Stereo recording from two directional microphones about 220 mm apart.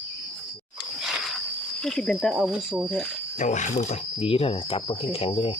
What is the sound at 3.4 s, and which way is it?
Speech, 35° left (ahead or behind).